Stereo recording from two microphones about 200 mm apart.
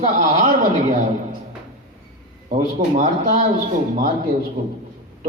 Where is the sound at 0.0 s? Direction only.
40° right (ahead or behind).